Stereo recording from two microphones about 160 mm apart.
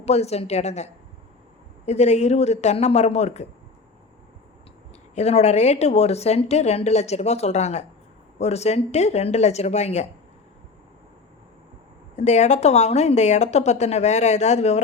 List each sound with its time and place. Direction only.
0.0 s a woman's voice: 40° left (ahead or behind)
5.1 s a woman's voice: 40° left (ahead or behind)
12.1 s a woman's voice: 45° left (ahead or behind)